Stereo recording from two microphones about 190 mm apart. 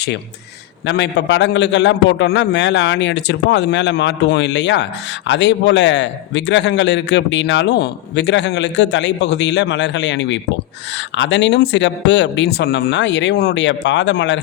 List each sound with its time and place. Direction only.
0.9 s a man's voice: 65° left (ahead or behind)